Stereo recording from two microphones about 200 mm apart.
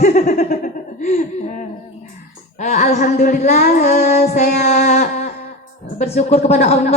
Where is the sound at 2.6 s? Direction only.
35° left (ahead or behind).